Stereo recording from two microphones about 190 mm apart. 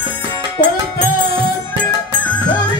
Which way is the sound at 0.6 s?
55° left (ahead or behind).